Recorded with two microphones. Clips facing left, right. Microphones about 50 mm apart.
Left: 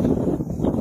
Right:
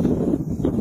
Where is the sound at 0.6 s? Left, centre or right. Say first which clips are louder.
Left 1 dB; centre.